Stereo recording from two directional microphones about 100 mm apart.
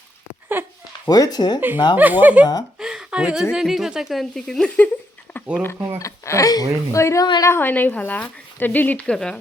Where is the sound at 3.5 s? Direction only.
5° right (ahead or behind).